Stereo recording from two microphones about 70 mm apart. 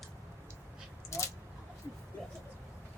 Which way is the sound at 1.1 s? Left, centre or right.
Left.